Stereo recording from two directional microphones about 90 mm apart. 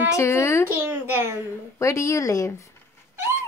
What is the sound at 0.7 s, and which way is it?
Speech, 25° right (ahead or behind).